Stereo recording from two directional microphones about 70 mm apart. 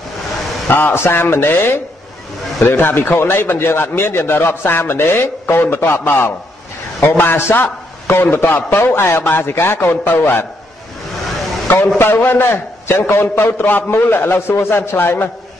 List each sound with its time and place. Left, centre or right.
0.7 s speech: left
11.6 s a sound: left
12.0 s speech: left